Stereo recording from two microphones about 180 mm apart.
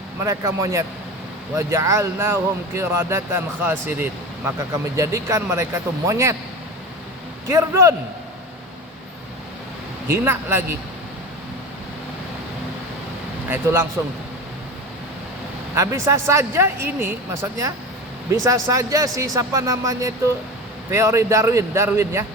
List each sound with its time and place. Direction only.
0.2 s speech: 15° right (ahead or behind)
7.4 s speech: 15° right (ahead or behind)
10.1 s speech: 15° right (ahead or behind)
15.7 s speech: 15° right (ahead or behind)